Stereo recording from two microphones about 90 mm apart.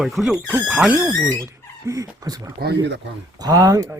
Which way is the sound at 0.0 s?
5° right (ahead or behind).